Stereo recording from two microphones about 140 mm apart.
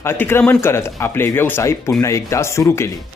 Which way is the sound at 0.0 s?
15° left (ahead or behind).